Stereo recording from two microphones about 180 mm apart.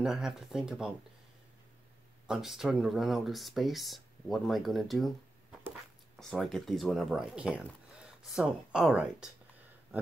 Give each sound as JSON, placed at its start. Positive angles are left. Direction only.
{"t": 0.0, "sound": "speech", "side_deg": 0}
{"t": 2.2, "sound": "speech", "side_deg": -5}
{"t": 6.1, "sound": "speech", "side_deg": 0}